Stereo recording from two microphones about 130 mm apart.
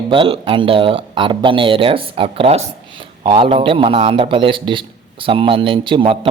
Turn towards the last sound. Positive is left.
turn(degrees=-40)  # may be behind; listen again after turning